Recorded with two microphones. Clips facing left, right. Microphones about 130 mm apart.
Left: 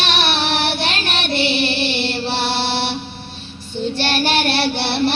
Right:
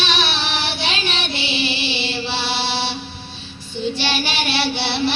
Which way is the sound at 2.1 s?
55° left (ahead or behind).